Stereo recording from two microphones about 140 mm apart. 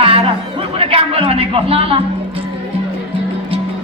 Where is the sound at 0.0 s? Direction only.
40° right (ahead or behind).